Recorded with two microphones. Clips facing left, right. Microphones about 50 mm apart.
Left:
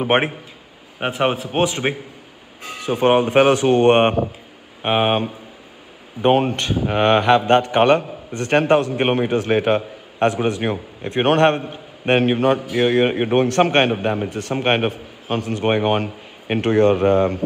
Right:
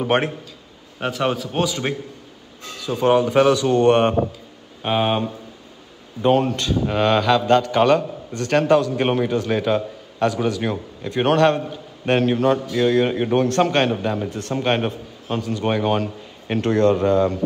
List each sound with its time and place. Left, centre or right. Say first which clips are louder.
0.0 s a man's voice: left 2 dB; left
2.8 s a man's voice: left 1 dB; left